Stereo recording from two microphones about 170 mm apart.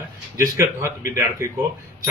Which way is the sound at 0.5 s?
15° right (ahead or behind).